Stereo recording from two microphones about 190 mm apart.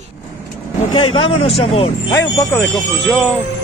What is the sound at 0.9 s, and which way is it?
Speech, 30° left (ahead or behind).